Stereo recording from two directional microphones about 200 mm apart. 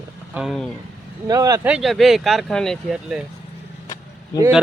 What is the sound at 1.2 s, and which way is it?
Speech, 20° right (ahead or behind).